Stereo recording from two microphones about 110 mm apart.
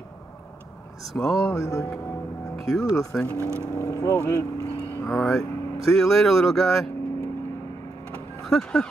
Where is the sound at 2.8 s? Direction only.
30° left (ahead or behind).